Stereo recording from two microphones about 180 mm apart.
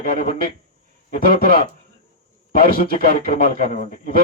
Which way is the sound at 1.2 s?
55° right (ahead or behind).